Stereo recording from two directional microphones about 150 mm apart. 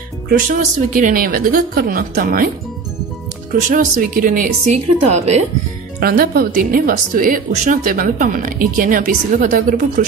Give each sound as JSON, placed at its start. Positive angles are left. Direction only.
{"t": 0.5, "sound": "a woman's voice", "side_deg": -60}
{"t": 3.5, "sound": "speech", "side_deg": -65}
{"t": 5.9, "sound": "a woman's voice", "side_deg": -80}